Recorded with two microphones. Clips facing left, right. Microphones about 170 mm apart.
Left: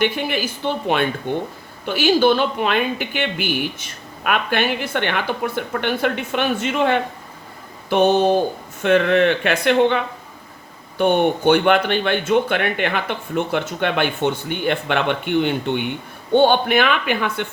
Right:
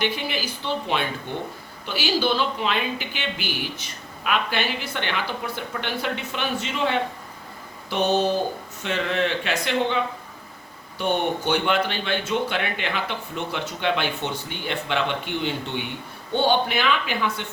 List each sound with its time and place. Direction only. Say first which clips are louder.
0.0 s speech: left 6 dB; 55° left (ahead or behind)